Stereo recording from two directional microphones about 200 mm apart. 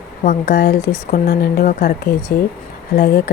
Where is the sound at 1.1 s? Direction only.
45° left (ahead or behind).